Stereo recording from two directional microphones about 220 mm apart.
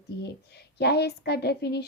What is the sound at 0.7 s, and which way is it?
Speech, 50° left (ahead or behind).